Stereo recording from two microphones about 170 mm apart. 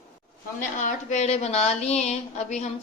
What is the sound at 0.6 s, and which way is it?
A woman's voice, 50° left (ahead or behind).